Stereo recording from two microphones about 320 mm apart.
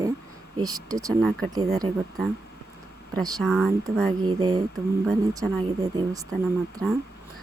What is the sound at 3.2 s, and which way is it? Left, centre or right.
Speech, centre.